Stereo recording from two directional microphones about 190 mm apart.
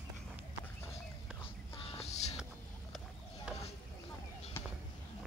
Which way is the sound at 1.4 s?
30° left (ahead or behind).